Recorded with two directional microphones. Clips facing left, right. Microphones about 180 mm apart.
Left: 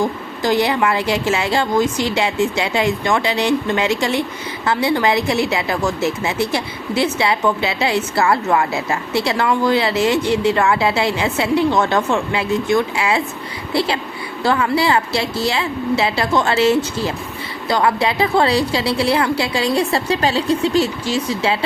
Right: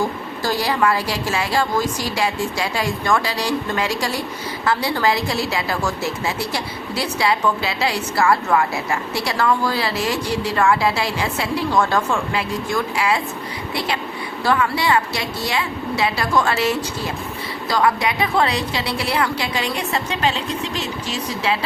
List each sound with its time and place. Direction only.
0.4 s a woman's voice: 20° left (ahead or behind)